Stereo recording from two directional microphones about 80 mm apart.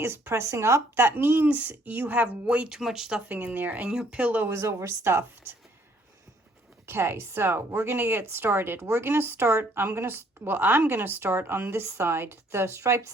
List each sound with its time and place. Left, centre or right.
0.0 s a woman's voice: right; by 3.3 s centre
3.3 s a woman's voice: right
4.4 s speech: right
6.8 s a woman's voice: right